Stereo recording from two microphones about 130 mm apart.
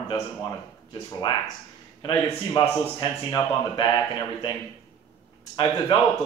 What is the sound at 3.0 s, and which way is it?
Speech, 30° left (ahead or behind).